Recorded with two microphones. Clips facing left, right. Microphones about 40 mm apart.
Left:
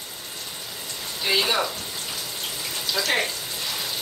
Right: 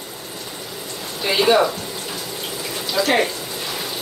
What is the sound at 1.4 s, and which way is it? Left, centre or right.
Speech, right.